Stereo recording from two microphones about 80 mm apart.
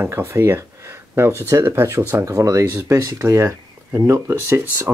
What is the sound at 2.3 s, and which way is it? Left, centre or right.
Speech, right.